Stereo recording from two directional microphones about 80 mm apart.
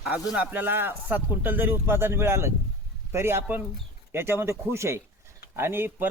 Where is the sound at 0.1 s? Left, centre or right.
Right.